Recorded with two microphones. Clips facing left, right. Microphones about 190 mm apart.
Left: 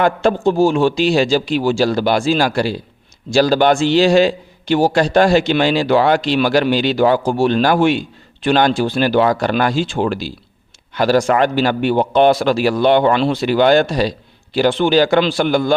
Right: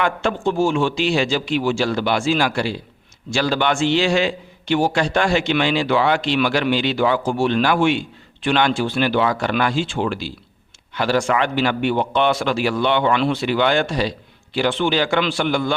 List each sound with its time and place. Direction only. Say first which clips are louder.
0.0 s a man's voice: left 6 dB; 40° left (ahead or behind)